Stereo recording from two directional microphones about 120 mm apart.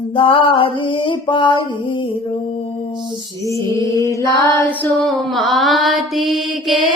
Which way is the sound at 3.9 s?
25° left (ahead or behind).